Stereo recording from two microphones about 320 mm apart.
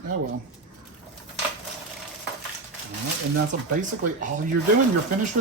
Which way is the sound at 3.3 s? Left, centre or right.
Right.